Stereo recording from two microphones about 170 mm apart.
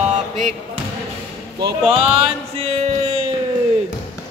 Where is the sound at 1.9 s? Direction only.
35° right (ahead or behind).